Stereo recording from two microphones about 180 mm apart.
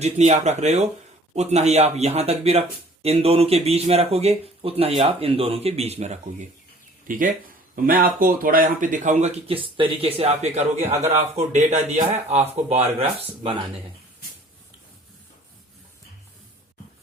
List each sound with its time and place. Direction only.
0.0 s speech: 40° right (ahead or behind)
7.8 s speech: 50° right (ahead or behind); by 13.7 s 30° right (ahead or behind)